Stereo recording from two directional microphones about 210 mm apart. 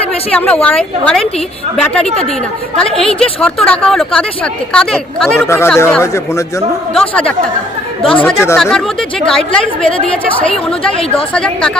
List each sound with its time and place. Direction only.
0.3 s a woman's voice: 5° left (ahead or behind)
2.8 s a woman's voice: centre (ahead or behind)